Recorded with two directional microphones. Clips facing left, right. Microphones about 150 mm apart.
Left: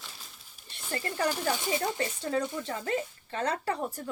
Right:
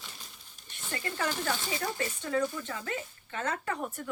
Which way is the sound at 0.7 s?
35° left (ahead or behind).